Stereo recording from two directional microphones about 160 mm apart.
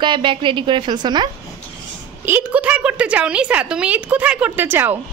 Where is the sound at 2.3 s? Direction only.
10° right (ahead or behind).